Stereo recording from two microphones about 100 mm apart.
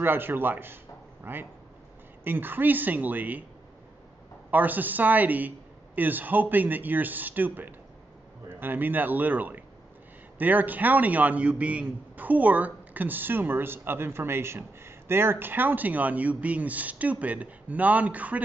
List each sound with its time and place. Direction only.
0.0 s a man's voice: 20° right (ahead or behind)
4.5 s a man's voice: 20° right (ahead or behind)